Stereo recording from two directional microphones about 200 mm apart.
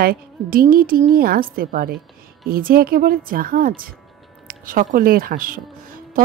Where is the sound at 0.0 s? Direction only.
45° right (ahead or behind).